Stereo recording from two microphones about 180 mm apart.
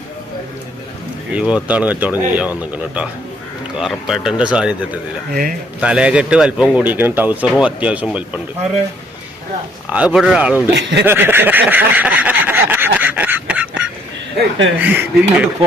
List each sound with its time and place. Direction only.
1.3 s a man's voice: 5° right (ahead or behind)
5.3 s a man's voice: 55° right (ahead or behind)
5.8 s a man's voice: 5° right (ahead or behind)
9.9 s a man's voice: 5° right (ahead or behind)
10.7 s speech: 70° right (ahead or behind)
11.0 s a sound: 10° right (ahead or behind)
14.8 s a man's voice: 10° right (ahead or behind)